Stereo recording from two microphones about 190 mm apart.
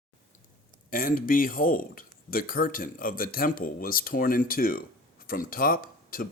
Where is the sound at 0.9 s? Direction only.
50° left (ahead or behind).